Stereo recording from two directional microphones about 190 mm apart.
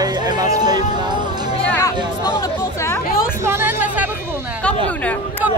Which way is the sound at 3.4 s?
15° right (ahead or behind).